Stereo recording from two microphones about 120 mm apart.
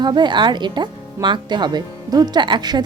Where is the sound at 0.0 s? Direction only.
40° right (ahead or behind).